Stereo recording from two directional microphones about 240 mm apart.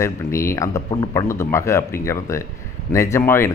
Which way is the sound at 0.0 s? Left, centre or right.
Centre.